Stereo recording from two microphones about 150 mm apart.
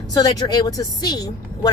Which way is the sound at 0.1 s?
25° left (ahead or behind).